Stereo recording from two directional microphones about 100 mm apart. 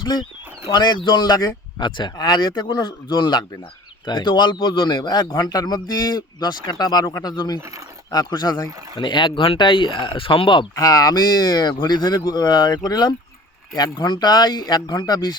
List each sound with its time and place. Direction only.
0.0 s a man's voice: 45° left (ahead or behind)
10.8 s a man's voice: 40° left (ahead or behind)